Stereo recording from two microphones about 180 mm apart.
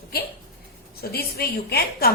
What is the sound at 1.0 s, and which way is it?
A woman's voice, 60° left (ahead or behind).